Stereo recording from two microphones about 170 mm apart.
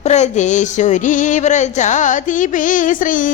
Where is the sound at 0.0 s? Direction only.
40° left (ahead or behind).